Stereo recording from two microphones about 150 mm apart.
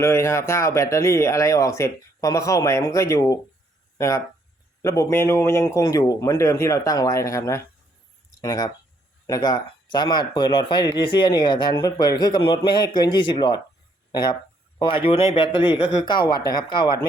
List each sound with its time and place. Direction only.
0.0 s a man's voice: 20° left (ahead or behind)
14.8 s a man's voice: 35° left (ahead or behind)